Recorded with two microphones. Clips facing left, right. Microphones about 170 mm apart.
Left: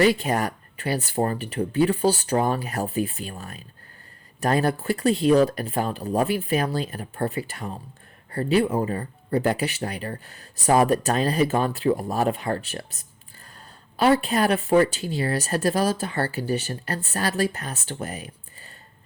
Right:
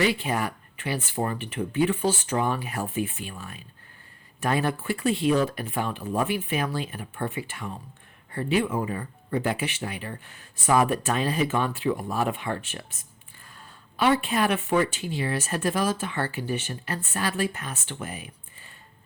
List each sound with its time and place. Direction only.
0.0 s speech: 40° left (ahead or behind)